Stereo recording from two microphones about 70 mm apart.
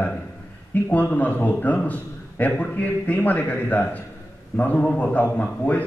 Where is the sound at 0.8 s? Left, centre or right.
Left.